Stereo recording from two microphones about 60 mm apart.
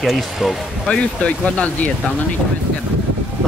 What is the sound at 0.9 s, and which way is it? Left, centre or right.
Speech, centre.